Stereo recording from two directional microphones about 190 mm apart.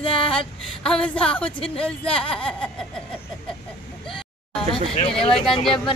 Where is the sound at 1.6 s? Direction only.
30° left (ahead or behind).